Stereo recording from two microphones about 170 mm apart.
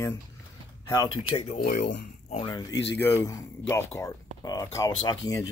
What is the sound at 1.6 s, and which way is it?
Speech, 50° left (ahead or behind).